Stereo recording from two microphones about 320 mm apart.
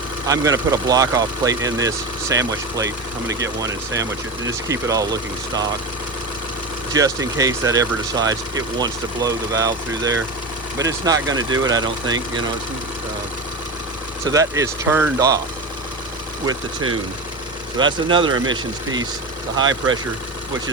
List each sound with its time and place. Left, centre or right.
0.3 s speech: centre
6.9 s speech: centre
14.3 s speech: centre
17.7 s speech: centre
19.5 s speech: centre